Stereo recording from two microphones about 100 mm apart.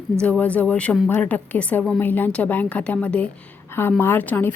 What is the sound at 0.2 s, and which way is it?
A woman's voice, 15° left (ahead or behind).